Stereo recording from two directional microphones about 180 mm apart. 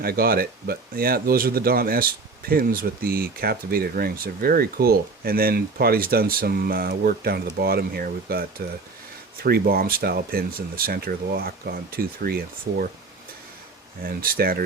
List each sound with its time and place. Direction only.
0.0 s speech: 55° right (ahead or behind)
14.0 s speech: 55° right (ahead or behind)